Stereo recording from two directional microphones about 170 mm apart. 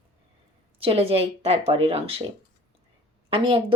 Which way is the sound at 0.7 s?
35° right (ahead or behind).